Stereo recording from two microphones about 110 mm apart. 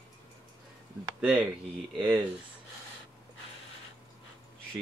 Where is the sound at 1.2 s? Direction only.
10° right (ahead or behind).